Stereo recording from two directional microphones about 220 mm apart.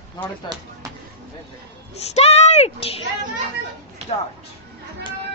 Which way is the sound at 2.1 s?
30° left (ahead or behind).